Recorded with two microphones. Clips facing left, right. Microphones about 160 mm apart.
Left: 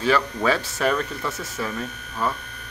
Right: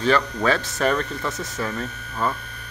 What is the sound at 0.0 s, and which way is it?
Speech, 5° left (ahead or behind).